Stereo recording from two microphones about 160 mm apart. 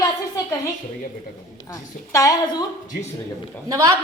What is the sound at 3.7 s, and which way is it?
Speech, 20° right (ahead or behind).